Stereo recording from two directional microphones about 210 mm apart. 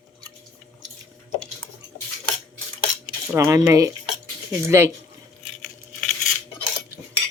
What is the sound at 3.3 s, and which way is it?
Cutlery, 15° right (ahead or behind).